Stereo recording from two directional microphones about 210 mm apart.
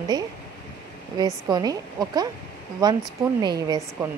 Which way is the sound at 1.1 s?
20° right (ahead or behind).